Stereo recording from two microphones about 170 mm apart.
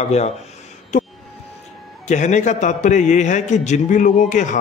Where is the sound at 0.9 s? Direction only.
45° left (ahead or behind).